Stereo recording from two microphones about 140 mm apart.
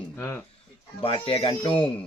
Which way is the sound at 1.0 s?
40° left (ahead or behind).